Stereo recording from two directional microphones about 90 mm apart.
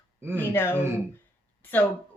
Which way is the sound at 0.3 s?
25° left (ahead or behind).